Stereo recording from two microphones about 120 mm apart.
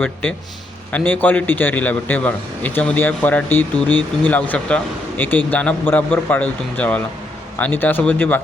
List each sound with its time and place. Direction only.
0.0 s a man's voice: 15° left (ahead or behind)